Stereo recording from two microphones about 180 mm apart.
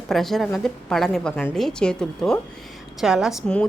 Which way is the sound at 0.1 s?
Centre (ahead or behind).